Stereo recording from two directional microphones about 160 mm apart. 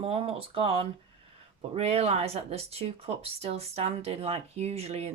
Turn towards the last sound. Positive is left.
turn(degrees=-40)  # may be behind; listen again after turning